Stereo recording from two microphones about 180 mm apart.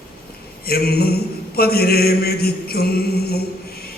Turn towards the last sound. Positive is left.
turn(degrees=60)  # may be behind; listen again after turning